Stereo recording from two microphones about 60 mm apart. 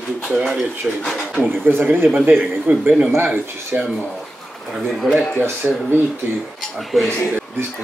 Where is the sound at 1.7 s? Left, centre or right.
Right.